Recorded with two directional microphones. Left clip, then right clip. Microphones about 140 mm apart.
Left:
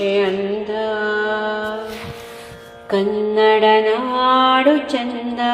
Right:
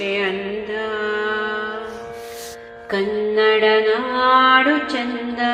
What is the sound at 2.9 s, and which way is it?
Music, 45° left (ahead or behind).